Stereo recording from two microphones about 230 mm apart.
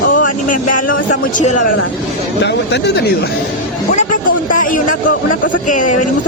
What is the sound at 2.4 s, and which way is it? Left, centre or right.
Speech, left.